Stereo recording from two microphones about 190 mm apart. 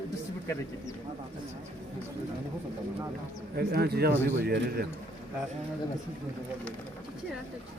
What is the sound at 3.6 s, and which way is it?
Speech, 55° right (ahead or behind).